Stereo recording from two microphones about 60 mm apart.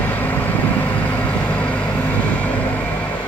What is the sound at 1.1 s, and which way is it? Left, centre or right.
Vehicle, left.